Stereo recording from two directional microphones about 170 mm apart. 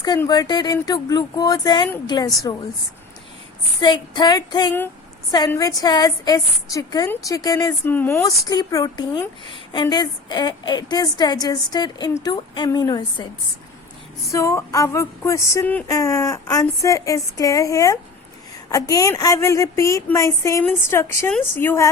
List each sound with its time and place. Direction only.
0.0 s speech: 20° left (ahead or behind)
3.8 s speech: 25° left (ahead or behind)
14.3 s speech: 20° left (ahead or behind)
18.7 s a sound: 20° left (ahead or behind)